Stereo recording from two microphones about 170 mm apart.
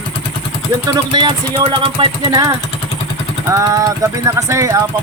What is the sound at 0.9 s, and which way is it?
Speech, 25° right (ahead or behind).